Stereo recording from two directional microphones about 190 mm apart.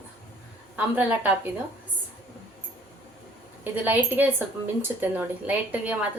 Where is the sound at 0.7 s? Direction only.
10° right (ahead or behind).